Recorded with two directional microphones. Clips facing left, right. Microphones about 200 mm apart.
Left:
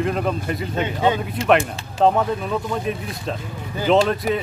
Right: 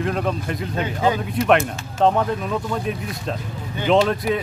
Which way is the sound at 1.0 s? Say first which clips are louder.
Right 1 dB; 25° left (ahead or behind).